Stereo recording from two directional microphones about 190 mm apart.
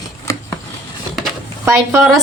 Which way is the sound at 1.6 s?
10° right (ahead or behind).